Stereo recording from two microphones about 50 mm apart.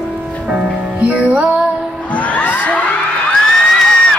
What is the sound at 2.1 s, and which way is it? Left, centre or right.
Music, left.